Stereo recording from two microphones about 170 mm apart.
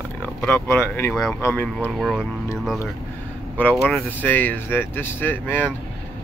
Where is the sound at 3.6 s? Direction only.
5° left (ahead or behind).